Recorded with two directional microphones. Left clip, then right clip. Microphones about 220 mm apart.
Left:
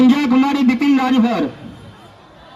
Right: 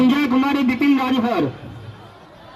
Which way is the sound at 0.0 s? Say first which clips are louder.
Left 3 dB; 50° left (ahead or behind).